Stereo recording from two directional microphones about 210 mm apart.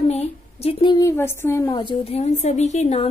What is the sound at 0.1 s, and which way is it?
A woman's voice, 30° left (ahead or behind).